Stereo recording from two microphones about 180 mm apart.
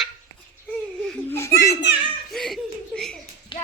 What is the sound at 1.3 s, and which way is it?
Children playing, 15° left (ahead or behind).